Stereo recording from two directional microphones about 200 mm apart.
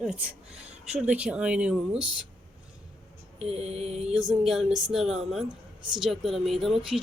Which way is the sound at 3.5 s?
30° right (ahead or behind).